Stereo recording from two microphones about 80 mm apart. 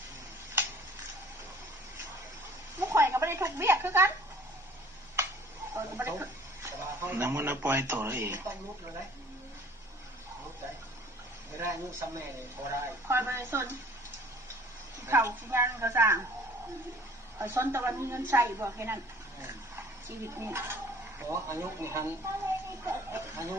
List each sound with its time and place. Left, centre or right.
2.7 s a sound: right
5.7 s speech: right
11.6 s speech: right
15.0 s speech: right
17.3 s speech: right